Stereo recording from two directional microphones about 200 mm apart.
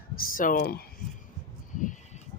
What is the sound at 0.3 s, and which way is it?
Speech, 45° left (ahead or behind).